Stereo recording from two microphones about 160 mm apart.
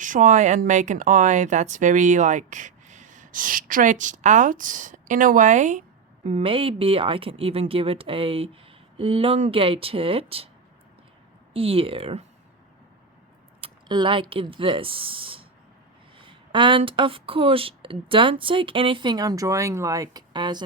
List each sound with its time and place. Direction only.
0.0 s speech: 55° right (ahead or behind)
6.2 s speech: 40° right (ahead or behind)
11.5 s speech: 35° right (ahead or behind)
13.6 s speech: 30° right (ahead or behind)